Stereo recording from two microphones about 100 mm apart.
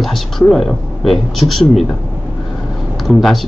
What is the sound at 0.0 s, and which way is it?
Speech, centre (ahead or behind).